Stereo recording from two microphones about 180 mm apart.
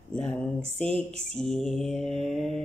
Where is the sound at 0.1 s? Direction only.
5° left (ahead or behind).